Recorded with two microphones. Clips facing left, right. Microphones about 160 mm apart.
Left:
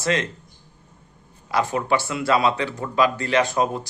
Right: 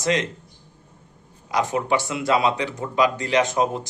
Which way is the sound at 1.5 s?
20° right (ahead or behind).